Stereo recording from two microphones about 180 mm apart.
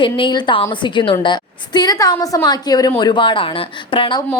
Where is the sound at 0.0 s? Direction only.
25° left (ahead or behind).